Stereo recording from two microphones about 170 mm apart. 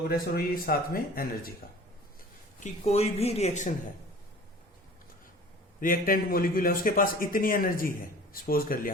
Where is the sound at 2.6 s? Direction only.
45° left (ahead or behind).